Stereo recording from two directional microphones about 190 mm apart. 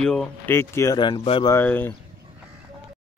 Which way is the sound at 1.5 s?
10° left (ahead or behind).